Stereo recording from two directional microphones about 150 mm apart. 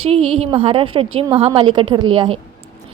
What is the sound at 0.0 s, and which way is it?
A woman's voice, 40° right (ahead or behind).